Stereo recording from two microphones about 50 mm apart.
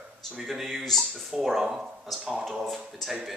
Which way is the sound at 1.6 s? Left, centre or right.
Centre.